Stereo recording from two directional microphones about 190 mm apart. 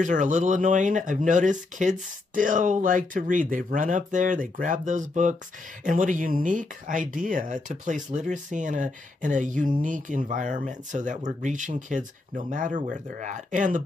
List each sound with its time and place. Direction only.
0.0 s speech: 40° right (ahead or behind)